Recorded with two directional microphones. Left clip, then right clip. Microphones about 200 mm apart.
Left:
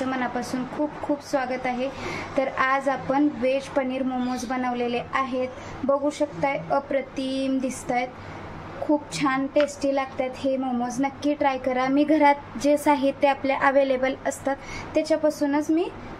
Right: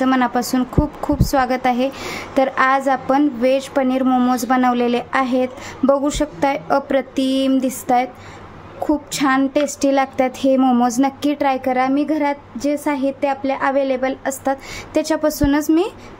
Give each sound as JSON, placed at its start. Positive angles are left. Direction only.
{"t": 0.0, "sound": "a woman's voice", "side_deg": -45}
{"t": 9.1, "sound": "a woman's voice", "side_deg": -40}
{"t": 15.0, "sound": "a woman's voice", "side_deg": -50}